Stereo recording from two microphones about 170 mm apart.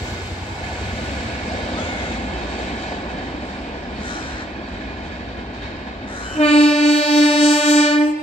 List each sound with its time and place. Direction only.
6.3 s train: 40° left (ahead or behind)